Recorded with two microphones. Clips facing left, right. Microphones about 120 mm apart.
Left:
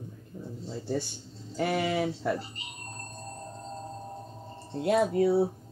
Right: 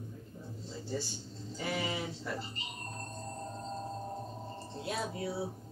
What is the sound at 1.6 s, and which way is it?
Speech, 65° left (ahead or behind).